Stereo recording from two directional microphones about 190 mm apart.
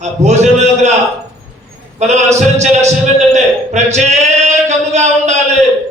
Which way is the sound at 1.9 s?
35° right (ahead or behind).